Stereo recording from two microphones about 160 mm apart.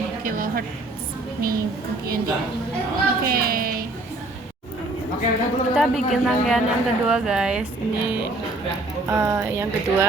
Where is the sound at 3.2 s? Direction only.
65° right (ahead or behind).